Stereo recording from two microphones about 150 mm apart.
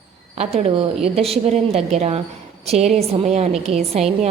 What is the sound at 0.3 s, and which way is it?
A woman's voice, 45° right (ahead or behind).